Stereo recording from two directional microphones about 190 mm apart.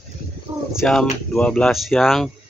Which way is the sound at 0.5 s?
10° right (ahead or behind).